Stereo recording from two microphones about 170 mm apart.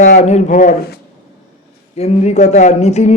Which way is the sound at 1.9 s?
40° left (ahead or behind).